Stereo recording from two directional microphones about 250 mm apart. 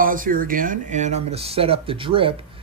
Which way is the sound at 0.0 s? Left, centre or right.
Right.